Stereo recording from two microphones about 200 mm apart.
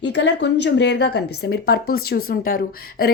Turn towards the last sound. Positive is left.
turn(degrees=50)  # may be behind; listen again after turning